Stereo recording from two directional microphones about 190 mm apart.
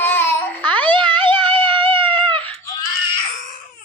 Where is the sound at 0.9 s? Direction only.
25° right (ahead or behind).